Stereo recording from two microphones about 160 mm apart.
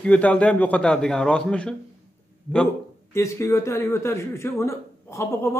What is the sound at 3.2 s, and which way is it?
Speech, 15° left (ahead or behind).